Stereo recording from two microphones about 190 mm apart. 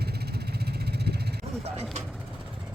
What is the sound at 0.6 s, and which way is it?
Vehicle, 60° right (ahead or behind).